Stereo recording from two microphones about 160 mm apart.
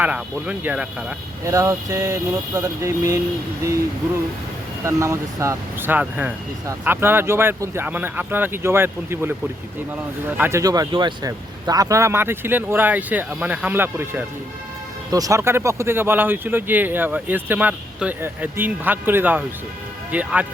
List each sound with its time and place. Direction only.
0.0 s speech: 10° right (ahead or behind)
1.5 s vehicle: 20° right (ahead or behind)
4.8 s speech: 20° right (ahead or behind)